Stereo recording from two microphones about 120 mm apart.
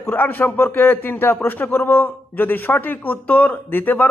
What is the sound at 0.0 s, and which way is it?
Speech, 15° left (ahead or behind).